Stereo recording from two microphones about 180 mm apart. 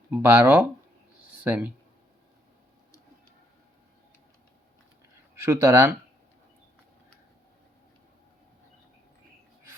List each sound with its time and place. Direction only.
0.1 s speech: 15° right (ahead or behind)
5.4 s speech: 15° right (ahead or behind)